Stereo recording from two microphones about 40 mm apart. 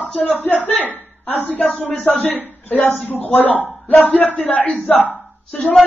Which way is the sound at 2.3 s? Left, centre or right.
Left.